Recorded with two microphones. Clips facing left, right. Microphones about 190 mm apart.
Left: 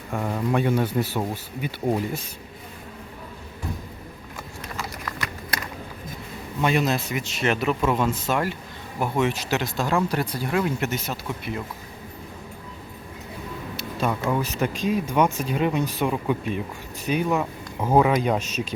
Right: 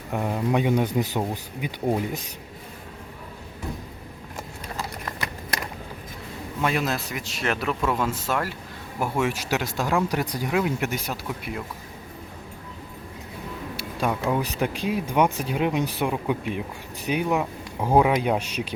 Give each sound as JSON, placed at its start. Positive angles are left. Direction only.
{"t": 0.1, "sound": "speech", "side_deg": -10}
{"t": 4.8, "sound": "a sound", "side_deg": -25}
{"t": 6.6, "sound": "a man's voice", "side_deg": 0}
{"t": 13.7, "sound": "speech", "side_deg": -10}